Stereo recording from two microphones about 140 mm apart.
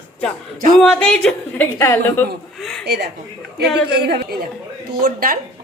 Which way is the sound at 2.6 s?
5° left (ahead or behind).